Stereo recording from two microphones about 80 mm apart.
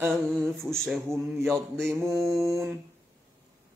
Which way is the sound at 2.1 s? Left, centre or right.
Centre.